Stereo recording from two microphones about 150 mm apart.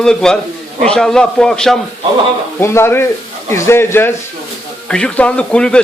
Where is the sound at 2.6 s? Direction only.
15° left (ahead or behind).